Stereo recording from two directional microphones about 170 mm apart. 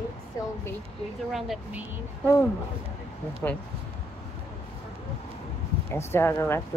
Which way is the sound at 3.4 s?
15° left (ahead or behind).